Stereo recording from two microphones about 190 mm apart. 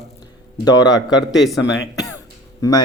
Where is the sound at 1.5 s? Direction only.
70° left (ahead or behind).